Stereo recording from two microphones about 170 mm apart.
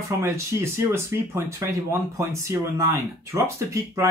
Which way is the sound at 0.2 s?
15° right (ahead or behind).